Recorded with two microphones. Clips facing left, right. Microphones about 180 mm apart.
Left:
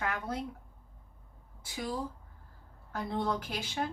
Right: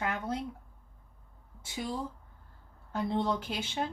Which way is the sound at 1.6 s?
25° right (ahead or behind).